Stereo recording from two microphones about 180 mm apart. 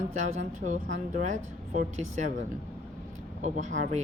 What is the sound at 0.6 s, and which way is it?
Speech, 45° right (ahead or behind).